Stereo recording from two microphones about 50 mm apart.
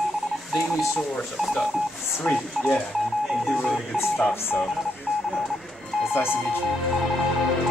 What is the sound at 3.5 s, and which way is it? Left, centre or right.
Telephone dialing, centre.